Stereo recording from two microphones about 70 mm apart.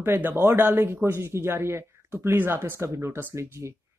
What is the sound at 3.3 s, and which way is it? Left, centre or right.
Speech, right.